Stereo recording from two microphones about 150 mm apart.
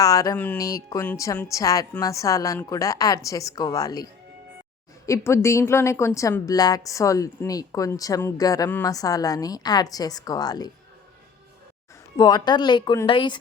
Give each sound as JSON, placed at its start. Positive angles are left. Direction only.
{"t": 0.0, "sound": "music", "side_deg": 25}
{"t": 0.5, "sound": "a woman's voice", "side_deg": 20}
{"t": 12.1, "sound": "a woman's voice", "side_deg": 30}